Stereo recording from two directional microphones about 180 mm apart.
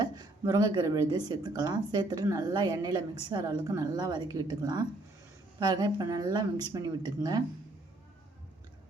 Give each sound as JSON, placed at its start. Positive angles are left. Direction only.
{"t": 0.0, "sound": "speech", "side_deg": -20}